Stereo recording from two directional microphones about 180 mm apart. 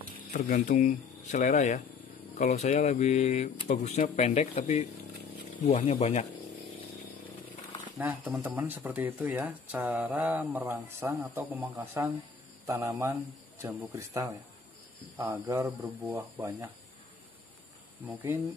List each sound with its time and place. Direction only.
0.3 s speech: 45° left (ahead or behind)
8.0 s speech: 10° right (ahead or behind)
18.0 s speech: 10° right (ahead or behind)